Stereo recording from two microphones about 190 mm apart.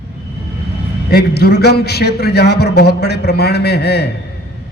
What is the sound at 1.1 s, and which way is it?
A man's voice, 55° left (ahead or behind).